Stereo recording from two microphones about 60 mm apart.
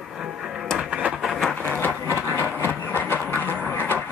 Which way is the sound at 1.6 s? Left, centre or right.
Left.